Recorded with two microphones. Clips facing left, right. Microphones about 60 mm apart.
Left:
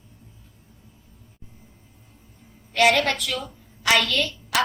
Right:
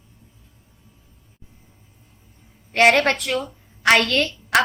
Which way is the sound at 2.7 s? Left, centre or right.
Right.